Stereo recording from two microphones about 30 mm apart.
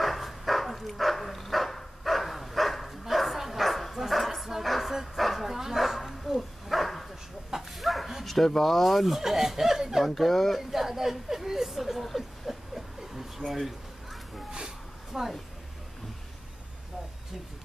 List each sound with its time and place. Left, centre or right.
0.0 s dog: centre
4.1 s bow-wow: centre
8.5 s speech: centre
10.0 s speech: centre
10.7 s a sound: centre
12.2 s a sound: centre
13.5 s speech: centre
15.1 s a woman's voice: centre